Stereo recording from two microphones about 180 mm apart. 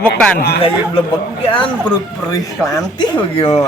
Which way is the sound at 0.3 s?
60° left (ahead or behind).